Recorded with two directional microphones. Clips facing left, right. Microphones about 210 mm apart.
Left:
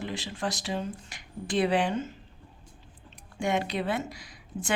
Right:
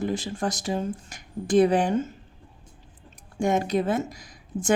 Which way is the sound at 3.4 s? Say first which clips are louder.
Right 5 dB; 45° right (ahead or behind).